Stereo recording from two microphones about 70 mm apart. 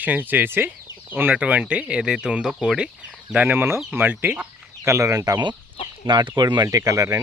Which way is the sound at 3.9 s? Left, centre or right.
Right.